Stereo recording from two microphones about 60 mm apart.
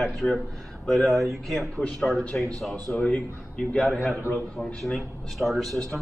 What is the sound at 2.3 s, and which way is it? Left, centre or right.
A man's voice, centre.